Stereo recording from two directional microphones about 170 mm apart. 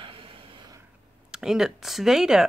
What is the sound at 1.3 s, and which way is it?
Speech, 5° right (ahead or behind).